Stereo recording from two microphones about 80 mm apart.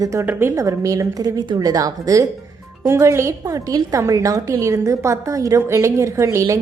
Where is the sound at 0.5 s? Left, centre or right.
Right.